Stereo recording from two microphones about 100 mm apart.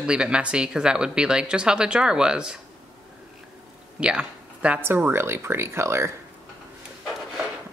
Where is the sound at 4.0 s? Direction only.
10° right (ahead or behind); by 6.1 s 25° right (ahead or behind).